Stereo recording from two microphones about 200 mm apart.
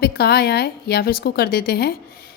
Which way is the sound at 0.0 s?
50° left (ahead or behind).